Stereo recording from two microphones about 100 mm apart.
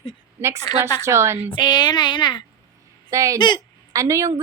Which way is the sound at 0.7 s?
40° left (ahead or behind).